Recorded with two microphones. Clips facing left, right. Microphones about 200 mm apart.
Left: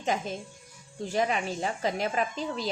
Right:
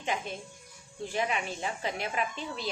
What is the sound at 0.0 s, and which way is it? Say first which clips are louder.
A woman's voice: left 4 dB; 40° left (ahead or behind).